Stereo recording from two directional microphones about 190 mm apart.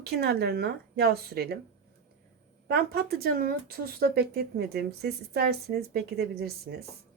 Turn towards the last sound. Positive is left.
turn(degrees=-55)  # may be behind; listen again after turning